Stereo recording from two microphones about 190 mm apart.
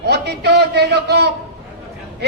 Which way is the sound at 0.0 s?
60° right (ahead or behind).